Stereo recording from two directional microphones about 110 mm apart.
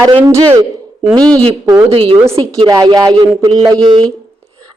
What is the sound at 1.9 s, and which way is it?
Speech, 55° right (ahead or behind).